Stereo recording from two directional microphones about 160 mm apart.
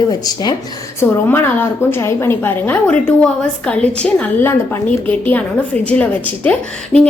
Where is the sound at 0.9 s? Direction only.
15° left (ahead or behind).